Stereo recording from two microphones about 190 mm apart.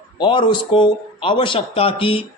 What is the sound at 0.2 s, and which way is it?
Speech, 25° left (ahead or behind).